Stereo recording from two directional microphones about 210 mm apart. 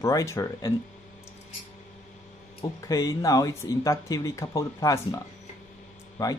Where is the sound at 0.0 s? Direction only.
15° left (ahead or behind).